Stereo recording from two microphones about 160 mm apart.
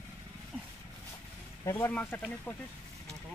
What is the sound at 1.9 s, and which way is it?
Speech, 10° left (ahead or behind).